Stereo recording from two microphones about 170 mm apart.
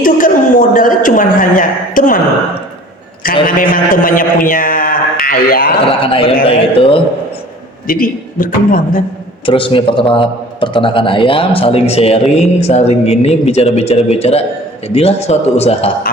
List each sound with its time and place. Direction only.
0.0 s a woman's voice: 55° left (ahead or behind)
3.4 s a man's voice: 55° left (ahead or behind)
6.0 s speech: 35° left (ahead or behind)
7.9 s a man's voice: 55° left (ahead or behind)
9.5 s speech: 30° left (ahead or behind)